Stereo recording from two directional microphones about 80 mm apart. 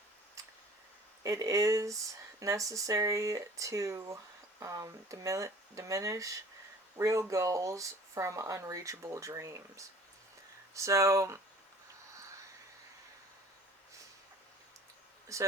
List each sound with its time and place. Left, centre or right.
1.2 s speech: right
15.3 s speech: right